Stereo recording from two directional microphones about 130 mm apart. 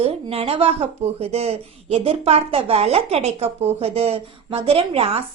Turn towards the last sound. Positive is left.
turn(degrees=-50)  # may be behind; listen again after turning